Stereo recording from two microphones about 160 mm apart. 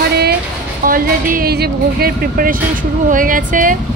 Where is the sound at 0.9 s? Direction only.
60° right (ahead or behind).